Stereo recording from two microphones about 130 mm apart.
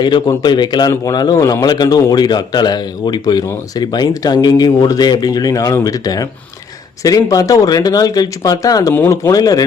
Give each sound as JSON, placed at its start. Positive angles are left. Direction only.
{"t": 0.0, "sound": "speech", "side_deg": 35}